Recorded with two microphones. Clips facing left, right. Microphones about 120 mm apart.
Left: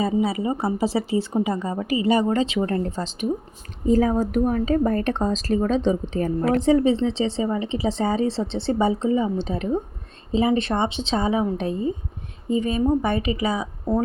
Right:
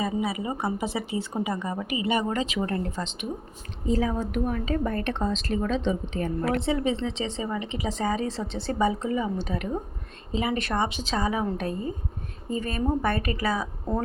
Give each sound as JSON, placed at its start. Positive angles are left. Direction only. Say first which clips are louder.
{"t": 0.0, "sound": "a woman's voice", "louder": "left 6 dB", "side_deg": 30}
{"t": 3.8, "sound": "a woman's voice", "louder": "left 7 dB", "side_deg": 45}